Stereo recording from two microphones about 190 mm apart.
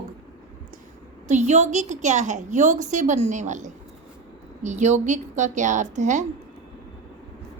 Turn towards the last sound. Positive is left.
turn(degrees=-40)  # may be behind; listen again after turning